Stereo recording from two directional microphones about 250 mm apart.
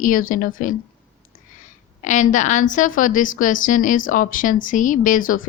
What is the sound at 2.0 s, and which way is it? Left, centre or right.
Speech, left.